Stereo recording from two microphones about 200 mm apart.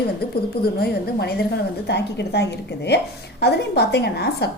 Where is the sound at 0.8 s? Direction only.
50° left (ahead or behind).